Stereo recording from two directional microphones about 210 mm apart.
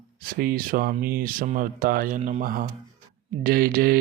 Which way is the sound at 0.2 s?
45° right (ahead or behind).